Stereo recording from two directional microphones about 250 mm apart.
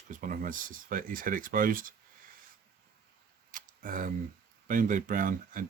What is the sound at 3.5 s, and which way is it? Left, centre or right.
Speech, right.